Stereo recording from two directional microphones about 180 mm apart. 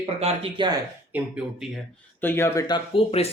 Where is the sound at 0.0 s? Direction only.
30° right (ahead or behind).